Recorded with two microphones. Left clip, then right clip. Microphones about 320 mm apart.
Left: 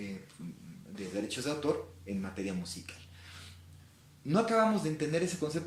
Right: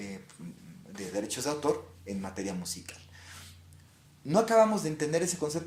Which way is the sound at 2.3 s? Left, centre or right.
Centre.